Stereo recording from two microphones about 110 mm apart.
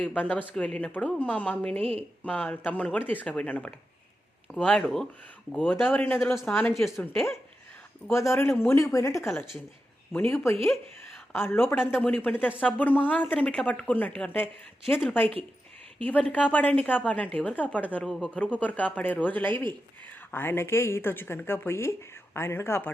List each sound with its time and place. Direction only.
0.0 s speech: 15° left (ahead or behind)
1.8 s speech: 65° right (ahead or behind)
2.2 s speech: 10° left (ahead or behind)
5.6 s speech: 15° left (ahead or behind)
10.1 s speech: 15° left (ahead or behind)
11.3 s speech: 20° left (ahead or behind)
16.3 s speech: 15° left (ahead or behind)